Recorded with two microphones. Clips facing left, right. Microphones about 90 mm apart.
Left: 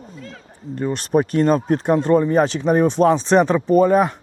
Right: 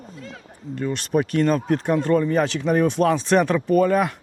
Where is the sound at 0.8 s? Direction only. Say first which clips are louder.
Left 3 dB; 40° left (ahead or behind).